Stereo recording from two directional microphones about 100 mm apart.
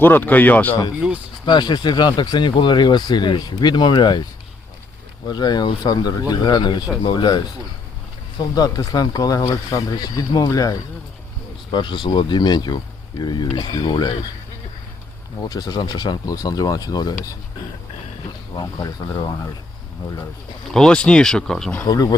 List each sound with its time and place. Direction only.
0.0 s speech: 20° left (ahead or behind)
1.0 s speech: 5° right (ahead or behind)
1.5 s speech: 45° left (ahead or behind)
5.3 s speech: 45° left (ahead or behind)
11.7 s speech: 50° left (ahead or behind)
15.4 s speech: 45° left (ahead or behind)
18.6 s speech: 40° left (ahead or behind)
20.7 s speech: 5° left (ahead or behind)
21.8 s speech: 40° left (ahead or behind)